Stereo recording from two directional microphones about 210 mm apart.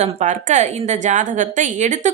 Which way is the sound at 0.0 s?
35° right (ahead or behind).